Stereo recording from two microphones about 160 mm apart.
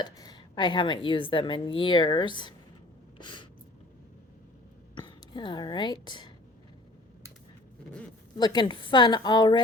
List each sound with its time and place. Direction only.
0.0 s speech: 25° left (ahead or behind)
3.2 s a sound: 30° left (ahead or behind)
4.9 s speech: 30° left (ahead or behind)
8.4 s speech: 25° left (ahead or behind)